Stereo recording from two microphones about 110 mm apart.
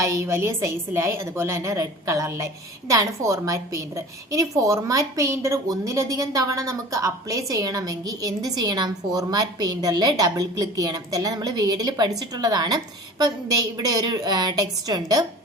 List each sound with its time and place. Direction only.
0.0 s a woman's voice: 25° right (ahead or behind)